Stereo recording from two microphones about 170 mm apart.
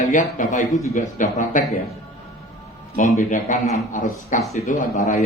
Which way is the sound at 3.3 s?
50° left (ahead or behind).